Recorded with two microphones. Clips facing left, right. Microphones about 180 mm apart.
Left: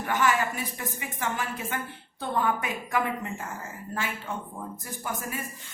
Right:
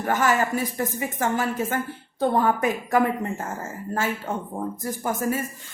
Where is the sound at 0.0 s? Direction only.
45° right (ahead or behind).